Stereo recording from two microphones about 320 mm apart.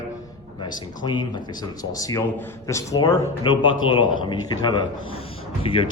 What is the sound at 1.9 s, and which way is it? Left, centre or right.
Speech, centre.